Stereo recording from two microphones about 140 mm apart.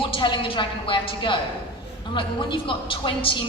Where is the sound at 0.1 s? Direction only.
35° left (ahead or behind).